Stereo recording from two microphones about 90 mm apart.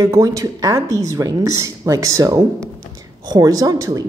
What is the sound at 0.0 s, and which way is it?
A woman's voice, 35° right (ahead or behind).